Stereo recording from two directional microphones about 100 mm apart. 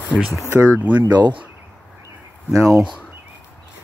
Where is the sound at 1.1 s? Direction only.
45° right (ahead or behind).